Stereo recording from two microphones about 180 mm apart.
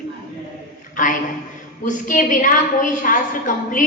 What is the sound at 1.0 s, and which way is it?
A woman's voice, 45° left (ahead or behind).